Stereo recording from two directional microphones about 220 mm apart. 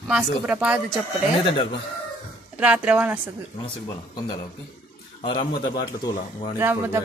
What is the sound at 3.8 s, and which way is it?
Speech, 20° left (ahead or behind).